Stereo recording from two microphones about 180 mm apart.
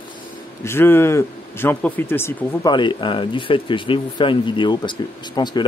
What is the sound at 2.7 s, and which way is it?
Speech, 25° left (ahead or behind).